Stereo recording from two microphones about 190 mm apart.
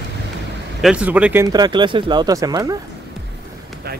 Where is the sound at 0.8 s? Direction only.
5° right (ahead or behind).